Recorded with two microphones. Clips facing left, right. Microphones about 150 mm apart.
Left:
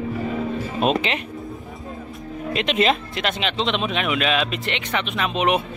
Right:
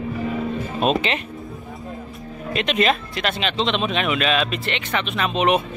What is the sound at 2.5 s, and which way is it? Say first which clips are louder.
Speech: even; 20° left (ahead or behind).